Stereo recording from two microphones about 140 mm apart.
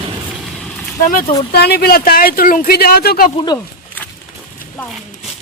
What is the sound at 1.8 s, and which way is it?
Speech, 90° left.